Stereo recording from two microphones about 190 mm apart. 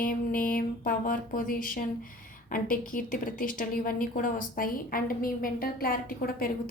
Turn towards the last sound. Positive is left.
turn(degrees=50)  # may be behind; listen again after turning